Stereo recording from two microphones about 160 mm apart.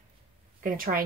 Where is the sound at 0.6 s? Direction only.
65° right (ahead or behind).